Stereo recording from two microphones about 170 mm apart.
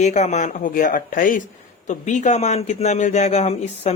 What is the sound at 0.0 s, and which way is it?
A man's voice, 45° left (ahead or behind).